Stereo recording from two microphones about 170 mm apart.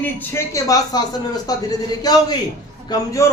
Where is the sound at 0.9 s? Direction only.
25° left (ahead or behind).